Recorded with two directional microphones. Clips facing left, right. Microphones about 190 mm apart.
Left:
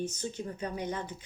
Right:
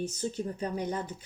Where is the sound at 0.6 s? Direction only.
35° right (ahead or behind).